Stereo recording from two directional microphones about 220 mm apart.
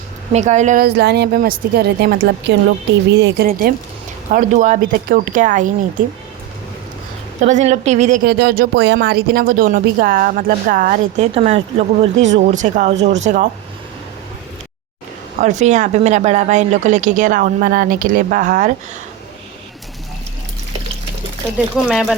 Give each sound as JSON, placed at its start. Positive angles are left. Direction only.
{"t": 0.3, "sound": "a woman's voice", "side_deg": -30}
{"t": 7.4, "sound": "a woman's voice", "side_deg": -30}
{"t": 15.4, "sound": "a woman's voice", "side_deg": -35}
{"t": 21.8, "sound": "speech", "side_deg": 0}